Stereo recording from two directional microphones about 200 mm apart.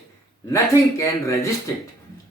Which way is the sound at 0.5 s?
15° left (ahead or behind).